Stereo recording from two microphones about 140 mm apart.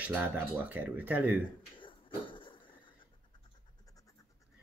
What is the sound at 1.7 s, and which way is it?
Dog, 35° left (ahead or behind).